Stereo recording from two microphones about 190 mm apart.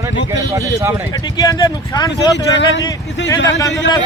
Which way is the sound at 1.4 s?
20° left (ahead or behind).